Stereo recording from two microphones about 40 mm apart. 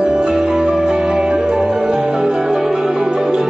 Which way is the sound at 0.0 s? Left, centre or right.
Right.